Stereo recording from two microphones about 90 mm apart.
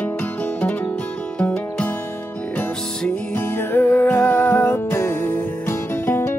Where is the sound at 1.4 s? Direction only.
15° left (ahead or behind).